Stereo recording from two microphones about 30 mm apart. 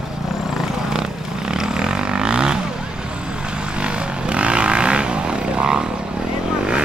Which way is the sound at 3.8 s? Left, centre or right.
Right.